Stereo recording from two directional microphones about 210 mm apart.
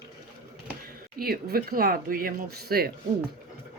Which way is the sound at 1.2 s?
45° right (ahead or behind).